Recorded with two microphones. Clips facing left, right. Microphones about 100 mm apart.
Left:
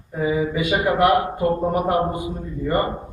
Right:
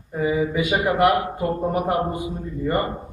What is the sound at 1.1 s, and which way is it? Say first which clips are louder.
Speech: left 3 dB; 15° left (ahead or behind).